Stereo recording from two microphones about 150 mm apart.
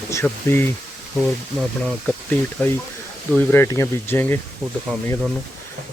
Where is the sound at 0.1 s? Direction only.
15° left (ahead or behind).